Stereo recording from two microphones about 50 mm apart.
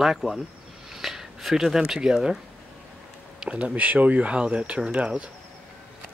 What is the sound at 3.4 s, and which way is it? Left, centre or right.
Speech, right.